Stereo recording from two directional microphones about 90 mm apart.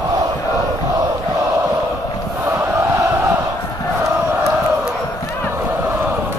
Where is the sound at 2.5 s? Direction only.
40° right (ahead or behind).